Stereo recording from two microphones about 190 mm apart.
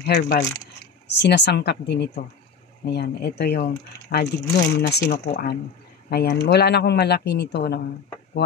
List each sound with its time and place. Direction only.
0.0 s speech: 60° left (ahead or behind)